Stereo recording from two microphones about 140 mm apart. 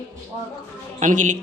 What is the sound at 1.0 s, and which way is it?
Speech, 65° right (ahead or behind).